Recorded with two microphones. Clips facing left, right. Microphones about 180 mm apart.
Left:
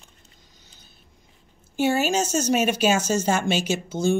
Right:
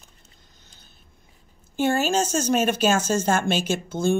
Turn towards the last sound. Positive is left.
turn(degrees=-55)  # may be behind; listen again after turning